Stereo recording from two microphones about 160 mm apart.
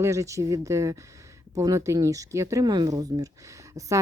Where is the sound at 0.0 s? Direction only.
20° right (ahead or behind).